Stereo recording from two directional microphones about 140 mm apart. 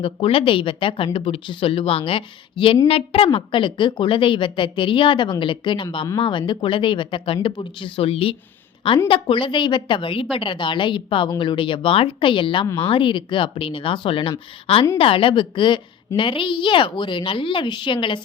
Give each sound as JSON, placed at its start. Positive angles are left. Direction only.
{"t": 0.0, "sound": "a woman's voice", "side_deg": 40}